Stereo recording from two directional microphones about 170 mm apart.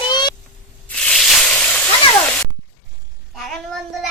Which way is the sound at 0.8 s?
5° left (ahead or behind).